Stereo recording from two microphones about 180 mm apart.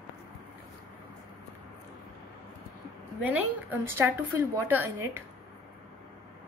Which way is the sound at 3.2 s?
10° right (ahead or behind).